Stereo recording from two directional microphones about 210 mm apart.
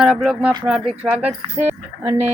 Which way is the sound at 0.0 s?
5° right (ahead or behind).